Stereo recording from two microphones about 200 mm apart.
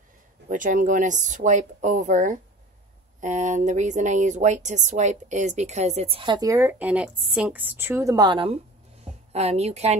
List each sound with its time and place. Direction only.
0.5 s speech: 40° right (ahead or behind)